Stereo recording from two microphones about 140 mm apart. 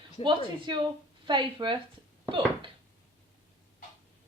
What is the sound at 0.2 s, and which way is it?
A woman's voice, 35° right (ahead or behind).